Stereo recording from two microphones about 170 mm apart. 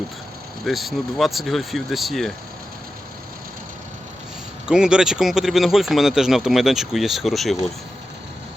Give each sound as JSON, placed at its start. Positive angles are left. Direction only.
{"t": 0.6, "sound": "speech", "side_deg": 0}
{"t": 4.6, "sound": "speech", "side_deg": -5}